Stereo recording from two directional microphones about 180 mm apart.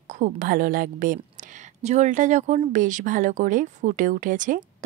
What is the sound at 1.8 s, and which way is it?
Speech, 40° right (ahead or behind).